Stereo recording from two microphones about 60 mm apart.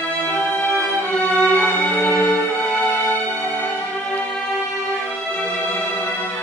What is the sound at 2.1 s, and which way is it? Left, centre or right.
Music, left.